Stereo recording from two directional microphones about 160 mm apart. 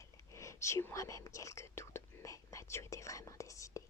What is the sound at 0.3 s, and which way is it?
Speech, 20° left (ahead or behind).